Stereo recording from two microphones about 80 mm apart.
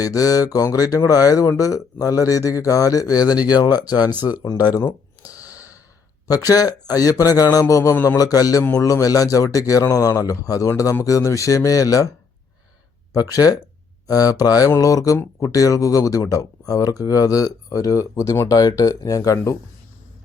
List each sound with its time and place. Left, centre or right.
0.0 s speech: left
4.7 s a sound: left
5.5 s breathing: left
6.2 s speech: left
13.1 s speech: left